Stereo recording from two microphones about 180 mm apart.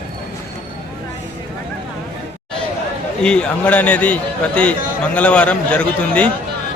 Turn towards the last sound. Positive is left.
turn(degrees=5)  # may be behind; listen again after turning